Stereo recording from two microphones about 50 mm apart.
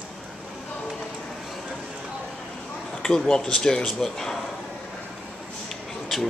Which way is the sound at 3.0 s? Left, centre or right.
Centre.